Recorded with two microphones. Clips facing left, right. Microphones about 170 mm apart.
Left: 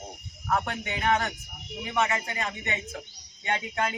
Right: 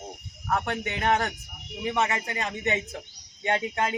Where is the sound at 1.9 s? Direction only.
30° right (ahead or behind).